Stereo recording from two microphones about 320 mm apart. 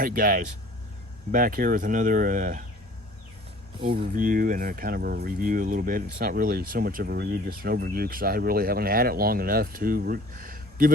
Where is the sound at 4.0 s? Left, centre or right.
Right.